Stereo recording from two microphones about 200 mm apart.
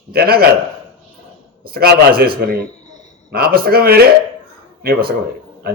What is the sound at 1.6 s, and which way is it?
A man's voice, 50° right (ahead or behind).